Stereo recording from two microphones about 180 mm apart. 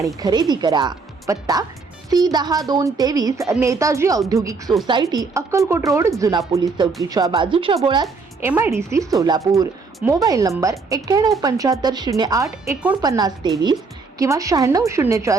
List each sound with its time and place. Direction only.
0.0 s a woman's voice: 20° right (ahead or behind)
8.4 s a woman's voice: 15° right (ahead or behind)